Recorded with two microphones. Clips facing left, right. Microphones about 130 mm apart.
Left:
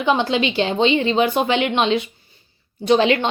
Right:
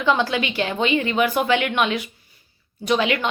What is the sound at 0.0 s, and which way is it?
A woman's voice, 20° left (ahead or behind).